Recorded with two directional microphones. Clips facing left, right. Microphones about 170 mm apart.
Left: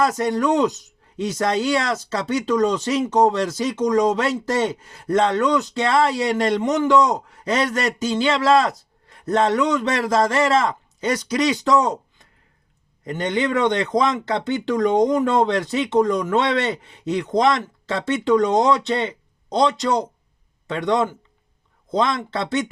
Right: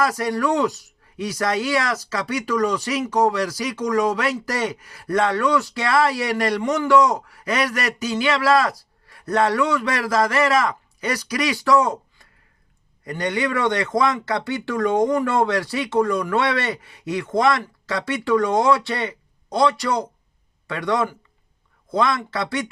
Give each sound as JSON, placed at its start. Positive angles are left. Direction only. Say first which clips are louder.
{"t": 0.0, "sound": "speech", "louder": "left 2 dB", "side_deg": 20}